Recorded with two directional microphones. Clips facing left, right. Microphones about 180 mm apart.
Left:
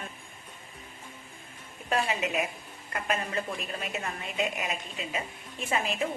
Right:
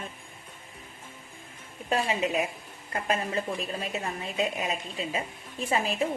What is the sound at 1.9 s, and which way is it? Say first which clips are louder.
A woman's voice: right 2 dB; 30° right (ahead or behind).